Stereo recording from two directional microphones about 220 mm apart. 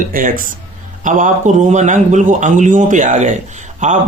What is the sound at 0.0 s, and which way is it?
Speech, 40° right (ahead or behind).